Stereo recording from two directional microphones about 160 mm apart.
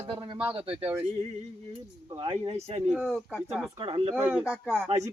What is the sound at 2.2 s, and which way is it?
Speech, 35° right (ahead or behind).